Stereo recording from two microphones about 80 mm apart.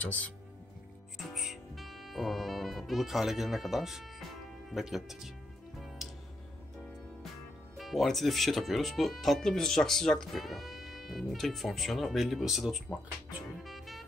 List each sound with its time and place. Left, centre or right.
0.0 s speech: left
1.1 s music: centre
4.6 s speech: centre
6.0 s music: centre
7.7 s speech: centre
13.7 s music: centre